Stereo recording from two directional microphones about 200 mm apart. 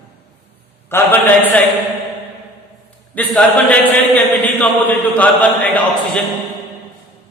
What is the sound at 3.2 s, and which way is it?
Speech, 5° left (ahead or behind).